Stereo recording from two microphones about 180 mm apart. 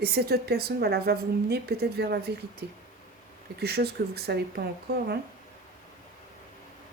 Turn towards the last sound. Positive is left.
turn(degrees=-65)  # may be behind; listen again after turning